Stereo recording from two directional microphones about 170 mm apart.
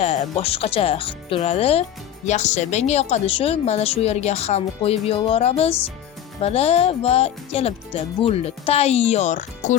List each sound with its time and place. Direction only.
0.0 s speech: 35° left (ahead or behind)